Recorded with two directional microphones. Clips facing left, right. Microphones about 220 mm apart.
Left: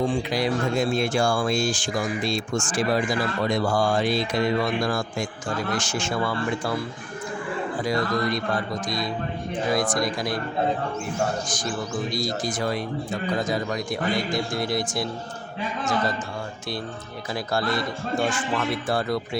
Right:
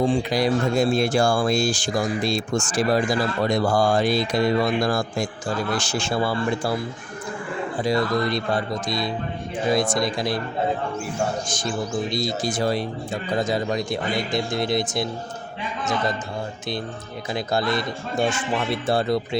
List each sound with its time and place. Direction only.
0.3 s speech: 40° right (ahead or behind)
7.9 s a man's voice: 30° right (ahead or behind)
11.4 s a man's voice: 25° right (ahead or behind)
17.3 s a man's voice: 20° right (ahead or behind)